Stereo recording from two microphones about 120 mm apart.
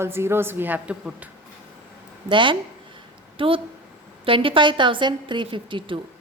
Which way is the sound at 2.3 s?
45° right (ahead or behind).